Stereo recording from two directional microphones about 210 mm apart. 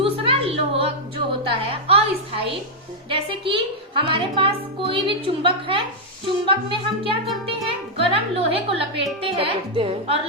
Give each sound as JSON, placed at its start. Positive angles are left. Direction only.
{"t": 0.0, "sound": "a sound", "side_deg": -25}
{"t": 1.5, "sound": "music", "side_deg": -25}
{"t": 3.1, "sound": "a woman's voice", "side_deg": -25}